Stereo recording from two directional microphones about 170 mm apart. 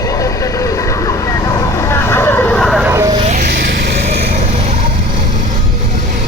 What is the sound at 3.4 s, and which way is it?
Vehicle, 70° right (ahead or behind).